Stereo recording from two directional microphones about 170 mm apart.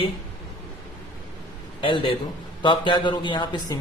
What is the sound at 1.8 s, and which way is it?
A man's voice, 30° left (ahead or behind).